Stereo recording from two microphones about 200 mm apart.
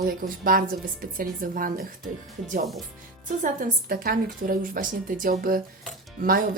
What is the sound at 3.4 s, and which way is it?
Speech, 40° right (ahead or behind).